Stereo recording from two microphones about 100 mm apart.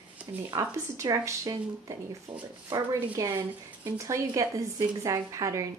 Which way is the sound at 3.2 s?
30° right (ahead or behind).